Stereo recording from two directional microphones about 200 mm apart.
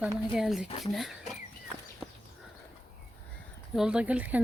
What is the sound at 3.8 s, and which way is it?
Speech, 5° right (ahead or behind).